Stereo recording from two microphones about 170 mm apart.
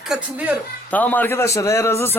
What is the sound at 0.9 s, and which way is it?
A man's voice, 10° left (ahead or behind).